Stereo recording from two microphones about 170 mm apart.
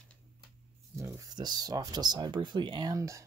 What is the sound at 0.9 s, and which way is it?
Speech, 20° right (ahead or behind).